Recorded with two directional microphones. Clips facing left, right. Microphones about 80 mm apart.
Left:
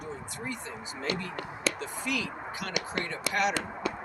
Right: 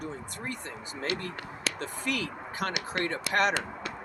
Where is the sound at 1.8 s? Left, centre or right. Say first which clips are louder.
Even; right.